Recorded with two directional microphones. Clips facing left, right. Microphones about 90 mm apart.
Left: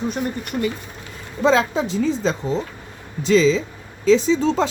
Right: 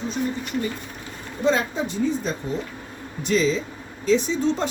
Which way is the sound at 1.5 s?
90° left.